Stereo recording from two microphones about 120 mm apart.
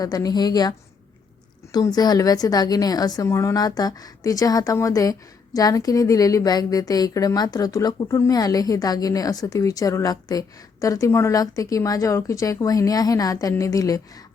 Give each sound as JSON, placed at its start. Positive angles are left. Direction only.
{"t": 0.0, "sound": "a woman's voice", "side_deg": 35}
{"t": 1.7, "sound": "a woman's voice", "side_deg": 35}